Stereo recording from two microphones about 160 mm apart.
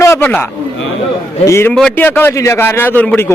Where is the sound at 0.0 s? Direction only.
15° left (ahead or behind).